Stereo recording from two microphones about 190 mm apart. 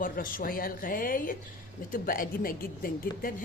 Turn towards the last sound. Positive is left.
turn(degrees=50)  # may be behind; listen again after turning